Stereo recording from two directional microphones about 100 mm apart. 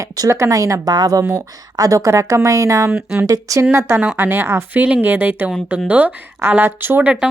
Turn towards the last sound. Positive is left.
turn(degrees=-15)  # may be behind; listen again after turning